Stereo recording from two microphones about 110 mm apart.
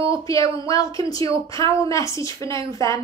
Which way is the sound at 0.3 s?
30° left (ahead or behind).